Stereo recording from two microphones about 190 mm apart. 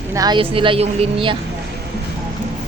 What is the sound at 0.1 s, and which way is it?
A woman's voice, 20° right (ahead or behind).